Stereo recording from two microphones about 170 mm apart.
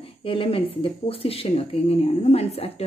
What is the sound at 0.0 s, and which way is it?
Speech, 30° left (ahead or behind).